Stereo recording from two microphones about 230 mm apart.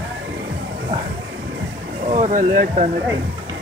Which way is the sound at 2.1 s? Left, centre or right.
Right.